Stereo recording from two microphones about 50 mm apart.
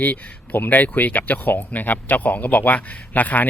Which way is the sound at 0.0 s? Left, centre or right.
Left.